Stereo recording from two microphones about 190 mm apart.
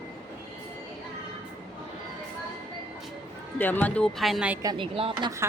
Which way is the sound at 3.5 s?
10° left (ahead or behind).